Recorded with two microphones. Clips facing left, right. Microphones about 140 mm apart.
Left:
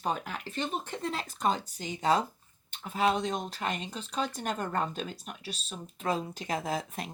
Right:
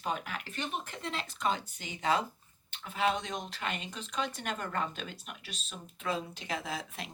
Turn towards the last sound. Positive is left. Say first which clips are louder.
# left 6 dB
turn(degrees=45)  # may be behind; listen again after turning